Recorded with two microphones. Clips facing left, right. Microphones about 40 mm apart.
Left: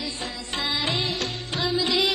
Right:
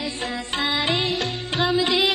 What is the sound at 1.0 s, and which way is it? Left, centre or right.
Music, centre.